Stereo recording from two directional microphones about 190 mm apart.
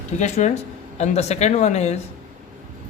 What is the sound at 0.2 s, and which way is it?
Speech, 35° left (ahead or behind).